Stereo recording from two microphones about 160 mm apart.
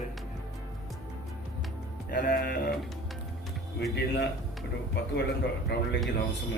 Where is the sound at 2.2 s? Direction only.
70° left (ahead or behind).